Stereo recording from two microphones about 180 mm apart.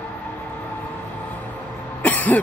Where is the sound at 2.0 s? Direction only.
10° left (ahead or behind).